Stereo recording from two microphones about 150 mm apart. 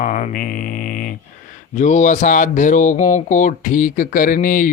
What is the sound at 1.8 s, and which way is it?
Speech, 55° left (ahead or behind).